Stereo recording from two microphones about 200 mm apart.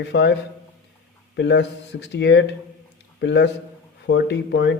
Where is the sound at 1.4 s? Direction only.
60° left (ahead or behind).